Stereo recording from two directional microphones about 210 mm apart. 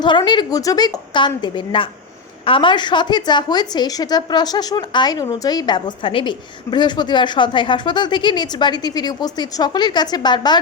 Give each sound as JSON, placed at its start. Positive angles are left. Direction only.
{"t": 0.0, "sound": "a woman's voice", "side_deg": 20}